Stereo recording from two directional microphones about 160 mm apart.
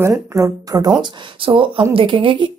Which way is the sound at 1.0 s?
30° right (ahead or behind).